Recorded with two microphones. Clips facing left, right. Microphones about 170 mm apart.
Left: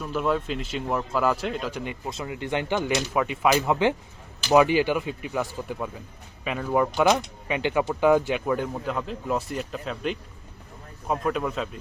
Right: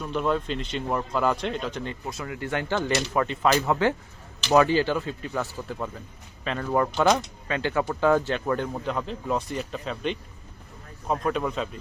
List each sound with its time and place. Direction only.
0.0 s speech: 5° left (ahead or behind)
2.0 s speech: 20° left (ahead or behind); by 11.8 s centre (ahead or behind)